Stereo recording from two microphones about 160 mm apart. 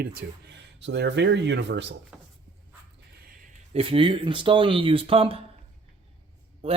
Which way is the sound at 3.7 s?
35° right (ahead or behind).